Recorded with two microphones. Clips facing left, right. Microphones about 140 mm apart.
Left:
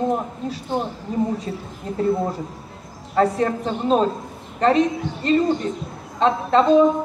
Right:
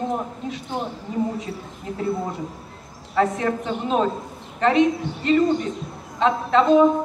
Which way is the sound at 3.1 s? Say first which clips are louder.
Left 2 dB; 35° left (ahead or behind).